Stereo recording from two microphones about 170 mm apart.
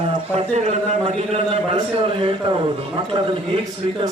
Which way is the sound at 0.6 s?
40° right (ahead or behind).